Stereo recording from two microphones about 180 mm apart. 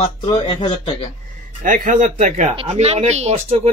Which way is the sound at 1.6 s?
45° right (ahead or behind).